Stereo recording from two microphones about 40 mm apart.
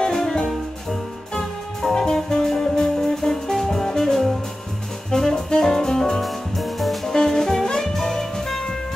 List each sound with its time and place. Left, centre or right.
0.0 s music: centre
2.0 s music: centre
5.1 s saxophone: centre
6.2 s music: centre